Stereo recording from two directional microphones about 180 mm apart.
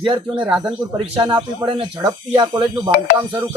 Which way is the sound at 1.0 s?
25° right (ahead or behind).